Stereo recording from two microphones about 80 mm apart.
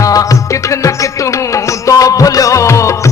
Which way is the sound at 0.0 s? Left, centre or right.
Left.